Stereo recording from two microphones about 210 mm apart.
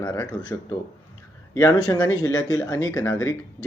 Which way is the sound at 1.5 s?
15° left (ahead or behind).